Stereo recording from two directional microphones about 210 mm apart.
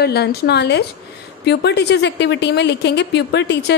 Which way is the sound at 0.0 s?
50° left (ahead or behind).